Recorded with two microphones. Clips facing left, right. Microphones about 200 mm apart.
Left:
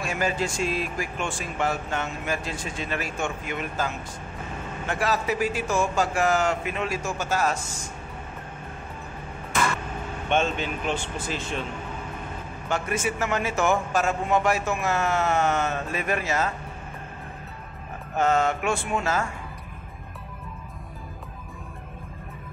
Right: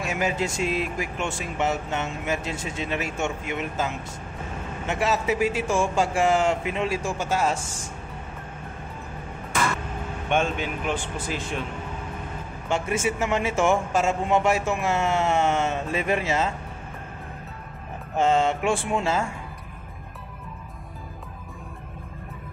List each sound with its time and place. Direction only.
0.0 s a man's voice: 20° right (ahead or behind)
10.3 s speech: 10° right (ahead or behind)
12.6 s a man's voice: 25° right (ahead or behind)
18.1 s a man's voice: 25° right (ahead or behind)